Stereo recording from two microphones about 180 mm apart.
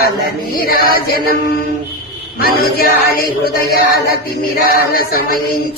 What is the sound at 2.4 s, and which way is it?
Mantra, 55° left (ahead or behind).